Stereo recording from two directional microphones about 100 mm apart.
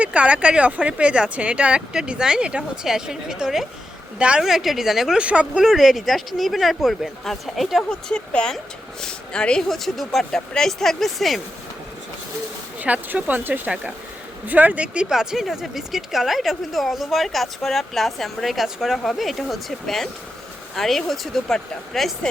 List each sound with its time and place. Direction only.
0.0 s speech: 10° right (ahead or behind)
12.8 s speech: 15° right (ahead or behind); by 22.3 s 5° left (ahead or behind)